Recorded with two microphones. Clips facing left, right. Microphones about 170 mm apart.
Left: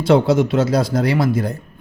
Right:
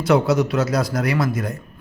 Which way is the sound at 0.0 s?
25° left (ahead or behind).